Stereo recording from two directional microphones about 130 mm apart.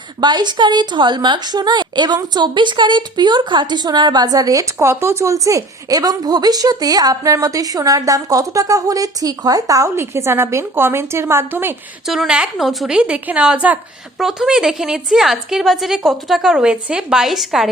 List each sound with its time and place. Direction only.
0.2 s a woman's voice: 35° right (ahead or behind); by 11.7 s 20° right (ahead or behind)
12.0 s a woman's voice: centre (ahead or behind)